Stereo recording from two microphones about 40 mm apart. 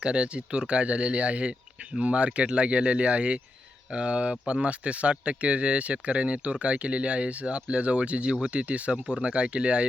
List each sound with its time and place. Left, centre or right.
0.0 s speech: right
9.0 s speech: right